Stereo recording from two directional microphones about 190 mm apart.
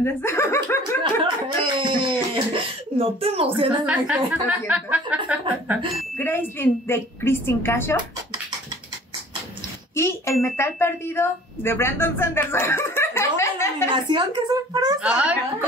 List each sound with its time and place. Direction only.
0.0 s speech: 15° left (ahead or behind)
1.0 s a sound: 25° right (ahead or behind)
3.7 s a woman's voice: 5° right (ahead or behind)
6.1 s speech: 10° left (ahead or behind)
9.9 s speech: 15° left (ahead or behind)
13.9 s speech: 25° right (ahead or behind)
15.0 s a woman's voice: 5° right (ahead or behind)